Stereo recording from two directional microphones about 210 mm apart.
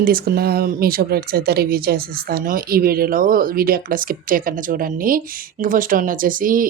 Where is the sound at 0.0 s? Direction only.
45° right (ahead or behind).